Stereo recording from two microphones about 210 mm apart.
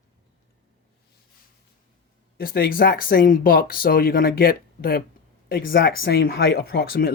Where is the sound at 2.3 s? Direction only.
45° left (ahead or behind).